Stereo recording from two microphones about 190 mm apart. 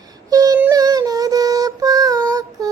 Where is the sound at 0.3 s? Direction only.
20° right (ahead or behind).